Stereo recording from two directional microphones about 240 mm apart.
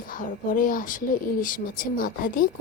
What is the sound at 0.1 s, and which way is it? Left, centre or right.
A woman's voice, left.